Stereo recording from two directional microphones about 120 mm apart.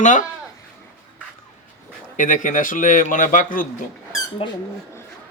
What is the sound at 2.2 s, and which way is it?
A man's voice, 90° left.